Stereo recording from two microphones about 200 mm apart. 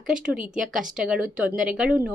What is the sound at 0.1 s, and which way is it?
Speech, 5° right (ahead or behind).